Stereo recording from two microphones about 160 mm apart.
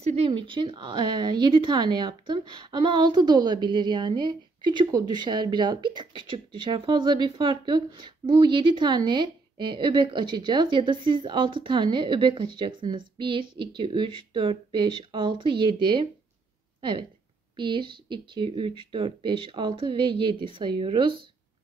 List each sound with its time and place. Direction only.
0.0 s a woman's voice: 35° right (ahead or behind)
17.6 s speech: 30° right (ahead or behind)